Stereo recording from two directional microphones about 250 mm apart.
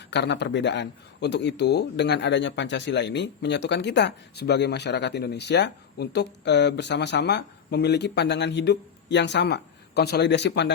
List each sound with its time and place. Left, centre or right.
0.0 s speech: left